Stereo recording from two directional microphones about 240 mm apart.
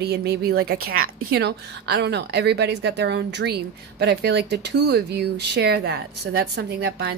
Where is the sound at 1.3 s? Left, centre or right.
Right.